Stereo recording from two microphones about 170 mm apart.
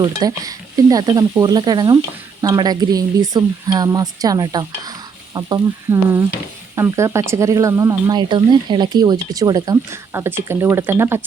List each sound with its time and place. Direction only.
0.0 s speech: 20° right (ahead or behind)